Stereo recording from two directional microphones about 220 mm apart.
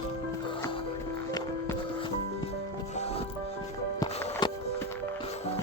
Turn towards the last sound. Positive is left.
turn(degrees=20)  # may be behind; listen again after turning